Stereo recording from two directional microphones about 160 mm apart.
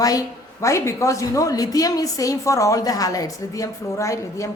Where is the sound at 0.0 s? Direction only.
20° left (ahead or behind).